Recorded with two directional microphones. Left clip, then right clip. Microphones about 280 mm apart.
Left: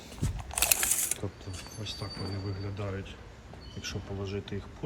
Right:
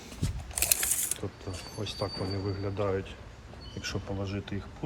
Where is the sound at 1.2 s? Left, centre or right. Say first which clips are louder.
Right 1 dB; centre.